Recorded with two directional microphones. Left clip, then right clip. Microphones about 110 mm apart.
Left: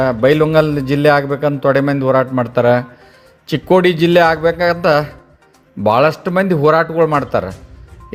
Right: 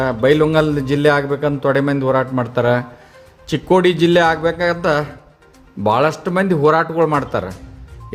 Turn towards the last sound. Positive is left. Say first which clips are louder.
# left 3 dB
turn(degrees=30)  # may be behind; listen again after turning